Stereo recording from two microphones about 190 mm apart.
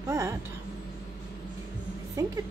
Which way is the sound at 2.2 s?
15° right (ahead or behind).